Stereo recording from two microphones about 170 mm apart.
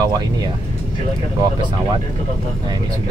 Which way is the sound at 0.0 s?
25° right (ahead or behind).